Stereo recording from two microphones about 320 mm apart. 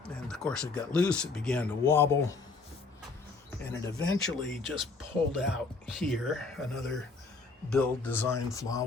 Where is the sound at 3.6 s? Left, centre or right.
Centre.